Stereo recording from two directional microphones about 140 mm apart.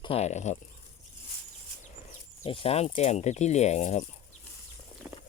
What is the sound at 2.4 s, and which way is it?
Speech, 40° left (ahead or behind).